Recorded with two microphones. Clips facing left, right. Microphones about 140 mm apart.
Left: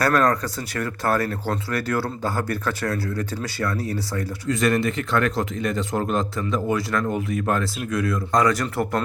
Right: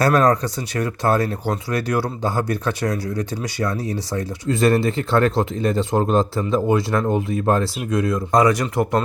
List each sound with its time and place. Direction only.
0.0 s speech: 20° right (ahead or behind)
8.5 s speech: centre (ahead or behind)